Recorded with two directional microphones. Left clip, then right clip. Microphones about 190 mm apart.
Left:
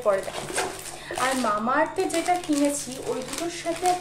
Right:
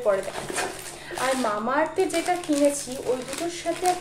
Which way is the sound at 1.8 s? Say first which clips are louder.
Even; 5° left (ahead or behind).